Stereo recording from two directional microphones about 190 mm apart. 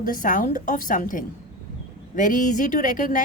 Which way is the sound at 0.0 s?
45° left (ahead or behind).